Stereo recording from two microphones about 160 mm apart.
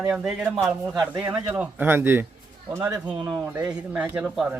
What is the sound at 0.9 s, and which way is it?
Speech, 25° right (ahead or behind).